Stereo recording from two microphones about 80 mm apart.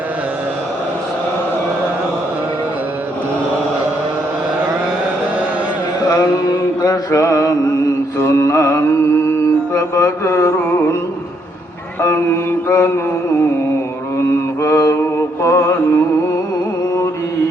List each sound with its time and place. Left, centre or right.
6.1 s mantra: left
12.0 s mantra: left
14.6 s mantra: left